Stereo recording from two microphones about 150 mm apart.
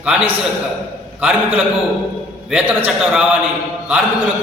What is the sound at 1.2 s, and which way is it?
A man's voice, 10° right (ahead or behind).